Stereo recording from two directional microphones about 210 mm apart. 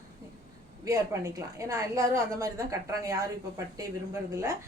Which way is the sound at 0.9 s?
15° right (ahead or behind).